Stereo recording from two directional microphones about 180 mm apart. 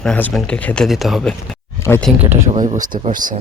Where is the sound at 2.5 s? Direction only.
45° right (ahead or behind).